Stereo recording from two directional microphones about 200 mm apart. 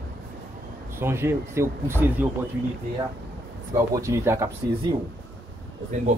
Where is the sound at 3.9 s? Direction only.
15° right (ahead or behind).